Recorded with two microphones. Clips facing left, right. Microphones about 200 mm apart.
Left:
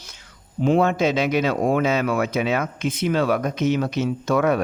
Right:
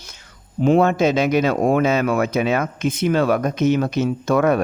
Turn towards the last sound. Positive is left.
turn(degrees=-50)  # may be behind; listen again after turning